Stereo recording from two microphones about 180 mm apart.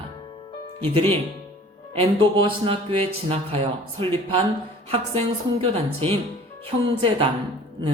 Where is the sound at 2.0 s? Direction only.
30° right (ahead or behind).